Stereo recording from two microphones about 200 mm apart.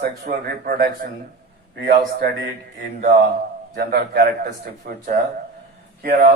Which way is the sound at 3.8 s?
50° right (ahead or behind).